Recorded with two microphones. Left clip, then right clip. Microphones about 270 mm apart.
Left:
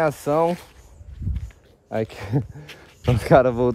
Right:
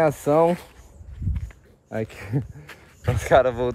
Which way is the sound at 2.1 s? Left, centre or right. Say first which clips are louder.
Left 3 dB; left.